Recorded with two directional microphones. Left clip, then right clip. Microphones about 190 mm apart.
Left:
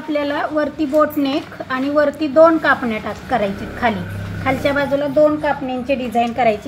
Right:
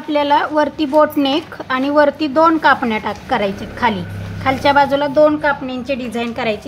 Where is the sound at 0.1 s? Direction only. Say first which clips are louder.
Right 5 dB; 25° right (ahead or behind).